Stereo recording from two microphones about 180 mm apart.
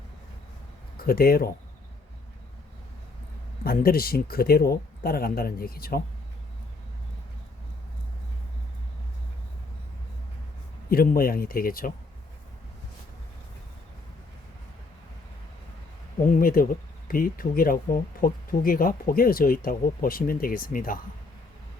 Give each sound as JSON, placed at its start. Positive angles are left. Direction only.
{"t": 0.9, "sound": "speech", "side_deg": 55}
{"t": 3.6, "sound": "speech", "side_deg": 55}
{"t": 10.8, "sound": "speech", "side_deg": 55}
{"t": 16.3, "sound": "speech", "side_deg": 55}